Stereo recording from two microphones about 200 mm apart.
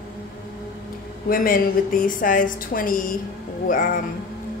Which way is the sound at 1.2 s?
45° left (ahead or behind).